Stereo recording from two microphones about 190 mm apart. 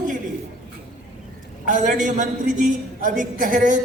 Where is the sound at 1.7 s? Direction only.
40° right (ahead or behind).